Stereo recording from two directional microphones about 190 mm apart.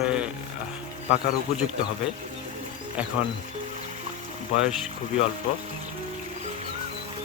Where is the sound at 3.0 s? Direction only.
5° right (ahead or behind).